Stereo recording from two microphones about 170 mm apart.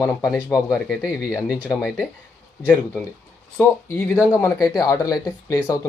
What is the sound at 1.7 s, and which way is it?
Speech, 10° left (ahead or behind).